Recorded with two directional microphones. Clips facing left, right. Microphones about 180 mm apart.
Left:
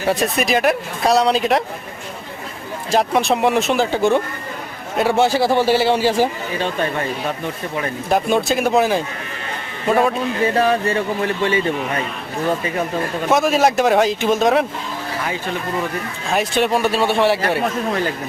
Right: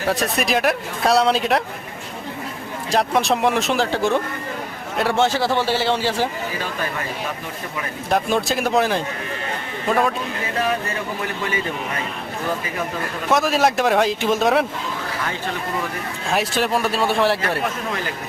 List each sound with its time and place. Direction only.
0.1 s a man's voice: centre (ahead or behind)
2.9 s a man's voice: centre (ahead or behind)
6.6 s speech: 25° left (ahead or behind)
8.1 s a man's voice: centre (ahead or behind)
10.6 s speech: 30° left (ahead or behind)
13.3 s a man's voice: centre (ahead or behind)
16.3 s a man's voice: centre (ahead or behind)